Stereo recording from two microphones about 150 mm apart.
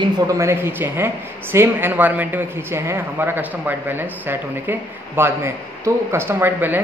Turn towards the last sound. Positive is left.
turn(degrees=-15)  # may be behind; listen again after turning